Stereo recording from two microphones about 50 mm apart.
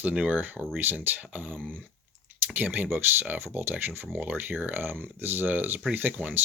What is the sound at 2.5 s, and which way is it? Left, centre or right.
Speech, right.